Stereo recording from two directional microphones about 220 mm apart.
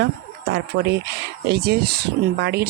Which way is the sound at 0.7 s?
45° right (ahead or behind).